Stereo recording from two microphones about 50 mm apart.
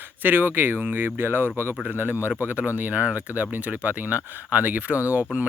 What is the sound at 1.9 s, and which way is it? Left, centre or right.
Speech, right.